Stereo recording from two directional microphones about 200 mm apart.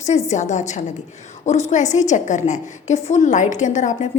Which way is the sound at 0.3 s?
35° left (ahead or behind).